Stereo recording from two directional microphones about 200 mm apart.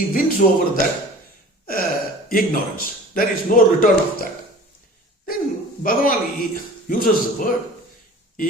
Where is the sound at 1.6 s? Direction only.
45° left (ahead or behind).